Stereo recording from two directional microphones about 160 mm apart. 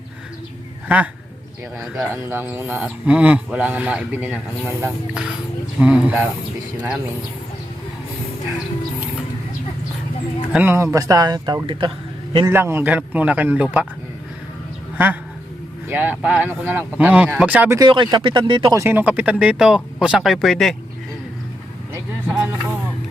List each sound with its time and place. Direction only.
0.9 s speech: 10° right (ahead or behind)
2.3 s speech: 15° right (ahead or behind)
10.5 s speech: 10° right (ahead or behind); by 11.9 s 30° right (ahead or behind)
12.5 s speech: 15° right (ahead or behind)
14.9 s a man's voice: 10° right (ahead or behind)
17.7 s speech: 30° right (ahead or behind)
18.8 s speech: 15° right (ahead or behind)
22.3 s music: 10° right (ahead or behind)